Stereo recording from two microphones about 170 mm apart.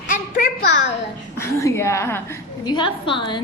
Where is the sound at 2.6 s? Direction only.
25° left (ahead or behind).